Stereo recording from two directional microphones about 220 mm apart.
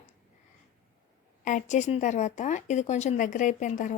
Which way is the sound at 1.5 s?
35° left (ahead or behind).